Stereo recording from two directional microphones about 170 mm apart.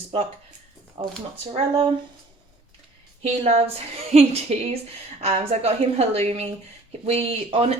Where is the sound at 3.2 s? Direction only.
35° right (ahead or behind).